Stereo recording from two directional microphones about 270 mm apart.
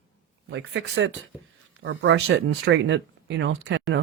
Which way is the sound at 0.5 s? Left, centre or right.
Right.